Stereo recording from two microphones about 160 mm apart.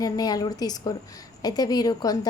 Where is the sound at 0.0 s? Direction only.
25° left (ahead or behind).